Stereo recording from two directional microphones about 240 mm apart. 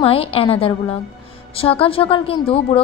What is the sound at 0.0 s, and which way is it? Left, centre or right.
A woman's voice, left.